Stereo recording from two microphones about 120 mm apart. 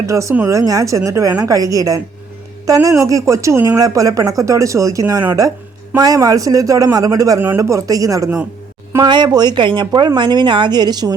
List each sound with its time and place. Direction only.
0.0 s a woman's voice: 25° right (ahead or behind)
7.3 s speech: 20° right (ahead or behind); by 11.1 s 35° right (ahead or behind)